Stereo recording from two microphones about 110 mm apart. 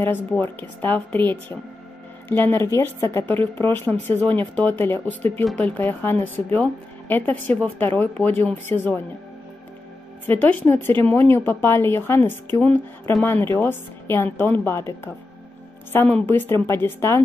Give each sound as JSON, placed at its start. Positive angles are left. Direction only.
{"t": 0.0, "sound": "a woman's voice", "side_deg": 20}
{"t": 10.2, "sound": "speech", "side_deg": 15}